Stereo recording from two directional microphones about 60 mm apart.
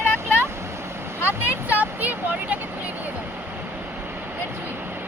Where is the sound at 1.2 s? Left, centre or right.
Right.